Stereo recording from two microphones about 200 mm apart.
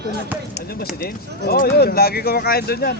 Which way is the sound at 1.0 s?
50° left (ahead or behind).